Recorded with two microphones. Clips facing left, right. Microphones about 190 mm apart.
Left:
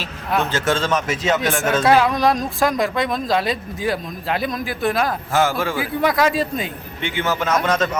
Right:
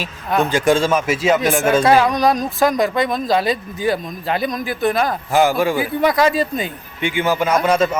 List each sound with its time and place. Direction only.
0.3 s speech: 15° right (ahead or behind)
5.3 s a man's voice: 15° right (ahead or behind)
5.7 s speech: centre (ahead or behind)
7.0 s a man's voice: 15° right (ahead or behind)